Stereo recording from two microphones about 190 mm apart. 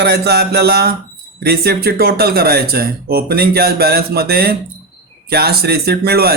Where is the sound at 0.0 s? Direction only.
60° right (ahead or behind).